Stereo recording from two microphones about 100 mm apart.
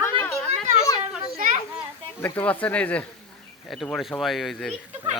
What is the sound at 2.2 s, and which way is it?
Speech, 20° left (ahead or behind).